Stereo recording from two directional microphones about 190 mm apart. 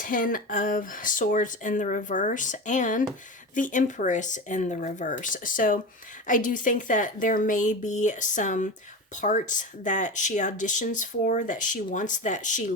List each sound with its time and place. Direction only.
0.0 s speech: 45° left (ahead or behind)